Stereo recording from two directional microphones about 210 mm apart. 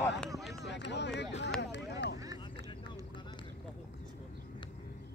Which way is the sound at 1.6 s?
55° left (ahead or behind).